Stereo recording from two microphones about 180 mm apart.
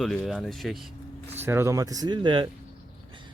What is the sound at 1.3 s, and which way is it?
Speech, 10° right (ahead or behind).